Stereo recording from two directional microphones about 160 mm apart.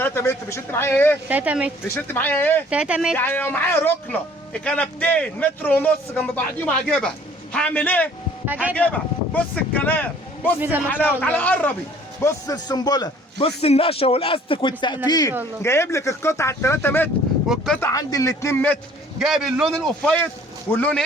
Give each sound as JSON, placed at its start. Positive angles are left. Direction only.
{"t": 0.0, "sound": "a man's voice", "side_deg": 15}
{"t": 1.3, "sound": "speech", "side_deg": -10}
{"t": 2.0, "sound": "a man's voice", "side_deg": 10}
{"t": 2.6, "sound": "speech", "side_deg": -5}
{"t": 3.2, "sound": "a man's voice", "side_deg": 10}
{"t": 8.4, "sound": "speech", "side_deg": -10}
{"t": 8.7, "sound": "a man's voice", "side_deg": 10}
{"t": 12.2, "sound": "a man's voice", "side_deg": 25}
{"t": 13.6, "sound": "a man's voice", "side_deg": 40}
{"t": 19.2, "sound": "a man's voice", "side_deg": -5}